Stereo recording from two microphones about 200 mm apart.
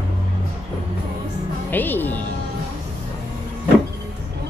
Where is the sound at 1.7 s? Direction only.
10° left (ahead or behind).